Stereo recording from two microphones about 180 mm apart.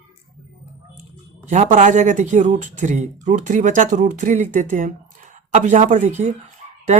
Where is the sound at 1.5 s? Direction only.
40° right (ahead or behind).